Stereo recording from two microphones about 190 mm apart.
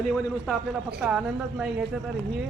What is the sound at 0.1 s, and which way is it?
A man's voice, centre (ahead or behind).